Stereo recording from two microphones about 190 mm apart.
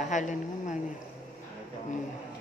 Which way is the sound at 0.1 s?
40° left (ahead or behind).